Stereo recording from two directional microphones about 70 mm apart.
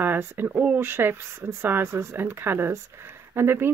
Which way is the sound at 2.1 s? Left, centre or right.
Right.